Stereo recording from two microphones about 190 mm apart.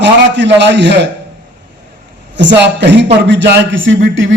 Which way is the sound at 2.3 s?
70° right (ahead or behind).